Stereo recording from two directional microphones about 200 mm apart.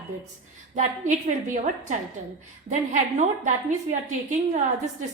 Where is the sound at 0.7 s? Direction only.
40° right (ahead or behind).